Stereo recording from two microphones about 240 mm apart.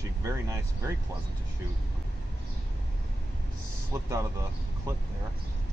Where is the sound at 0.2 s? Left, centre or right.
Centre.